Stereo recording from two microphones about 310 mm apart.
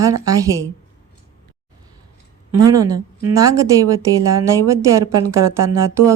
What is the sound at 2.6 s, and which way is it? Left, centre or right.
Speech, centre.